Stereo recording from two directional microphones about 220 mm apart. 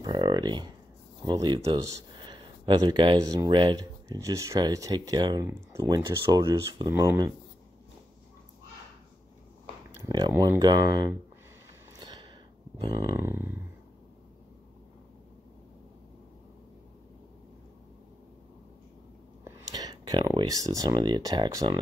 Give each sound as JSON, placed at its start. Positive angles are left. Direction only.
{"t": 0.0, "sound": "a sound", "side_deg": -20}
{"t": 1.2, "sound": "speech", "side_deg": -20}
{"t": 10.0, "sound": "speech", "side_deg": -15}
{"t": 12.0, "sound": "a sound", "side_deg": -20}
{"t": 13.1, "sound": "speech", "side_deg": -10}
{"t": 19.4, "sound": "speech", "side_deg": -15}